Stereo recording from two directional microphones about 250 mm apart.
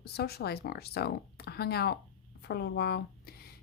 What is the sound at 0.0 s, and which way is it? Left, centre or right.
Speech, left.